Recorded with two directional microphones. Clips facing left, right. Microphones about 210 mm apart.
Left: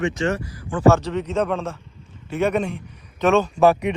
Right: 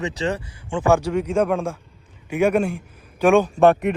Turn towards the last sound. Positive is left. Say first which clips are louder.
# right 1 dB
turn(degrees=0)  # may be behind; listen again after turning